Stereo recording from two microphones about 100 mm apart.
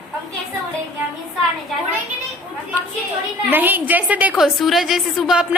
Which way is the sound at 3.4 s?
20° right (ahead or behind).